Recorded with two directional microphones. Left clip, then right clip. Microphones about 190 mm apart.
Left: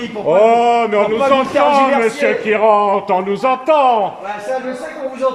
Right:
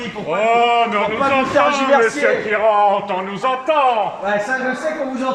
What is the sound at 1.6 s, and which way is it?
A man's voice, 10° left (ahead or behind).